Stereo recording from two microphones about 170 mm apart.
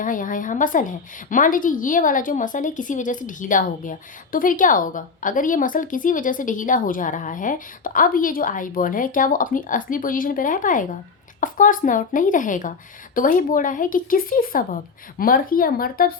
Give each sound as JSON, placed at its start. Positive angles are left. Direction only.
{"t": 0.0, "sound": "a woman's voice", "side_deg": 50}